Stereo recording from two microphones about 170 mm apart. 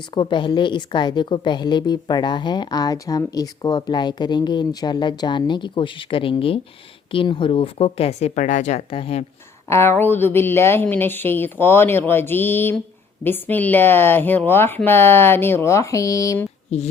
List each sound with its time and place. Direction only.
0.1 s a woman's voice: 30° left (ahead or behind)
9.6 s speech: 15° left (ahead or behind)
16.7 s speech: 40° left (ahead or behind)